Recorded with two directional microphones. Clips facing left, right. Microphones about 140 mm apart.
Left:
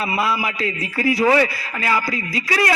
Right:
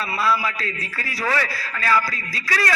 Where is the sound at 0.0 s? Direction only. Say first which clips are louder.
Left 1 dB; 20° left (ahead or behind).